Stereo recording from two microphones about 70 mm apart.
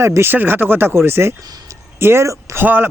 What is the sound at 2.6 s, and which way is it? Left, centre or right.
Speech, right.